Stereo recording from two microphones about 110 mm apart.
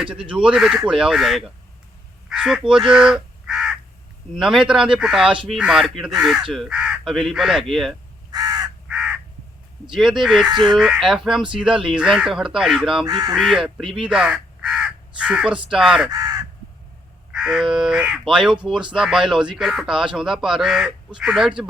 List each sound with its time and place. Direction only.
0.0 s speech: 10° right (ahead or behind)
8.3 s crow: 35° right (ahead or behind)
8.9 s crow: 10° right (ahead or behind)
10.0 s speech: 5° right (ahead or behind)
13.1 s speech: 35° right (ahead or behind)
13.3 s speech: 5° right (ahead or behind)
16.0 s speech: 35° right (ahead or behind)
17.3 s speech: 5° right (ahead or behind)